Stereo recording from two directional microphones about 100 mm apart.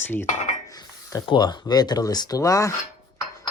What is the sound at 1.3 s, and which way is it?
Speech, 50° left (ahead or behind).